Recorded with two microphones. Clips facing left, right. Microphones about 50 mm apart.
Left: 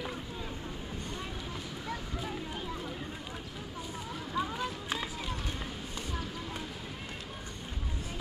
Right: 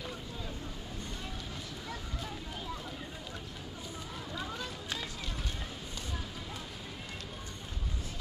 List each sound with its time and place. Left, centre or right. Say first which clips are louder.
4.4 s run: left 8 dB; centre